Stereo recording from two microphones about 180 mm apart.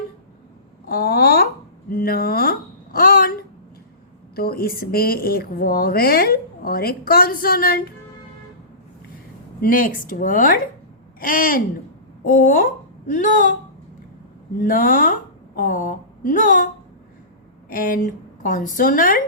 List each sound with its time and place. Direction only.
0.9 s a sound: 60° left (ahead or behind)
4.4 s a woman's voice: 55° left (ahead or behind)
9.6 s a woman's voice: 50° left (ahead or behind)
14.6 s a woman's voice: 50° left (ahead or behind)
17.7 s a woman's voice: 50° left (ahead or behind)